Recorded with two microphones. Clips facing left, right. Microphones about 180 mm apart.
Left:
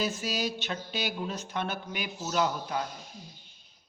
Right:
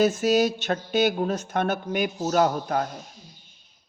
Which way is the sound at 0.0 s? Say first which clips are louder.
Right 11 dB; 45° right (ahead or behind).